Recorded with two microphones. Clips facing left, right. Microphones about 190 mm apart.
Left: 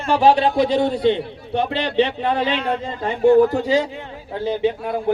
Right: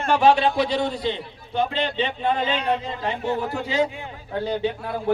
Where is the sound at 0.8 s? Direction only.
60° left (ahead or behind).